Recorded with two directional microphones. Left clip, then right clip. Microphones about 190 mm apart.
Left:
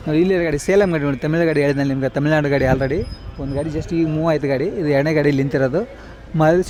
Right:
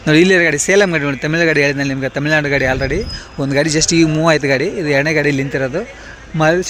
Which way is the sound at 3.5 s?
15° right (ahead or behind).